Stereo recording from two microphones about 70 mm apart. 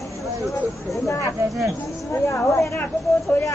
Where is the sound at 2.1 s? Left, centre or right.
Left.